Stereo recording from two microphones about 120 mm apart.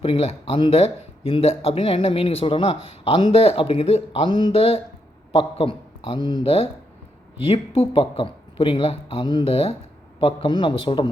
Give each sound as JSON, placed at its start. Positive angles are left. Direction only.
{"t": 0.0, "sound": "speech", "side_deg": 50}
{"t": 4.3, "sound": "speech", "side_deg": 40}